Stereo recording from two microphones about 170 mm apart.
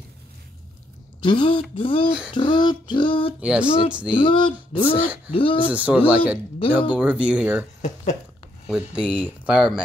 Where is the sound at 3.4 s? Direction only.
5° right (ahead or behind).